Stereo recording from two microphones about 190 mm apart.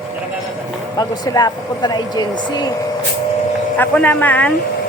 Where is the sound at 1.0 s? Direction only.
20° left (ahead or behind).